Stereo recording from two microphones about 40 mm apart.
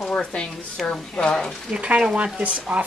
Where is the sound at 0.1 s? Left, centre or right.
Left.